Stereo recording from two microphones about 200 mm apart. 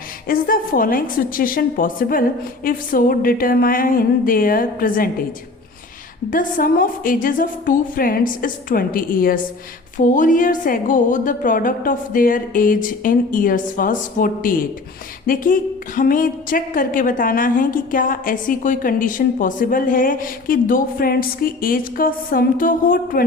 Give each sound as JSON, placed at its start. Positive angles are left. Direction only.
{"t": 0.3, "sound": "a woman's voice", "side_deg": 45}
{"t": 6.3, "sound": "a woman's voice", "side_deg": 45}
{"t": 16.0, "sound": "a woman's voice", "side_deg": 40}